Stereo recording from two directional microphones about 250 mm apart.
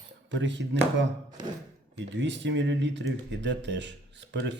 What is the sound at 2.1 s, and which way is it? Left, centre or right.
Speech, right.